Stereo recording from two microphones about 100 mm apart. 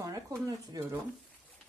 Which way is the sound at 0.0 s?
35° right (ahead or behind).